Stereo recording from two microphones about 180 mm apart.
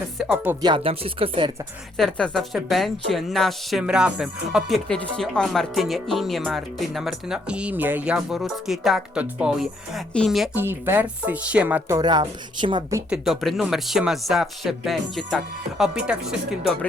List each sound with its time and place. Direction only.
0.2 s a woman's voice: 5° right (ahead or behind)
0.6 s speech: 30° right (ahead or behind)
2.0 s a woman's voice: 5° left (ahead or behind)
10.6 s speech: 10° right (ahead or behind)
11.9 s speech: 20° right (ahead or behind)
13.1 s a woman's voice: centre (ahead or behind)